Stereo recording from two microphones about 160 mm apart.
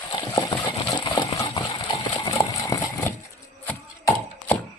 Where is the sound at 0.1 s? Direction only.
25° left (ahead or behind).